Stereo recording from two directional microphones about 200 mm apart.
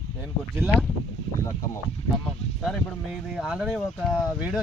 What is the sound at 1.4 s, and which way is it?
Speech, 15° left (ahead or behind).